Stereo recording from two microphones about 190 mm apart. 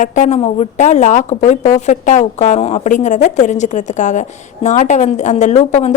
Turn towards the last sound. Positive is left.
turn(degrees=35)  # may be behind; listen again after turning